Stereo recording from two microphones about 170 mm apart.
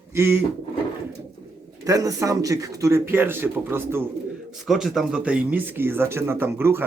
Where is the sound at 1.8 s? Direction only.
20° right (ahead or behind).